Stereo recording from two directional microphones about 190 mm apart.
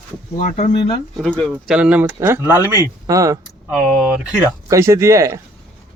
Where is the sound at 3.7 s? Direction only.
5° right (ahead or behind).